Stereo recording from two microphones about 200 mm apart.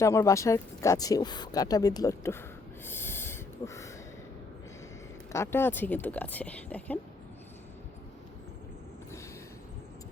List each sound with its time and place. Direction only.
0.0 s speech: 15° left (ahead or behind)
2.8 s snort: 10° left (ahead or behind)
5.3 s speech: 15° left (ahead or behind)